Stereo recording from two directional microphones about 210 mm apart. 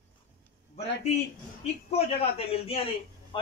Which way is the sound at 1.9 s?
30° left (ahead or behind).